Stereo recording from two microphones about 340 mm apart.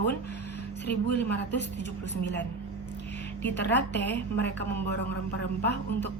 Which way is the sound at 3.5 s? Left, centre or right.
Left.